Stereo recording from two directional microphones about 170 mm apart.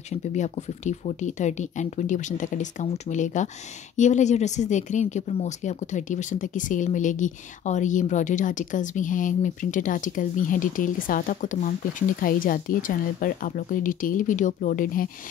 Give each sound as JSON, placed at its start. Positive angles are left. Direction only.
{"t": 0.3, "sound": "speech", "side_deg": 45}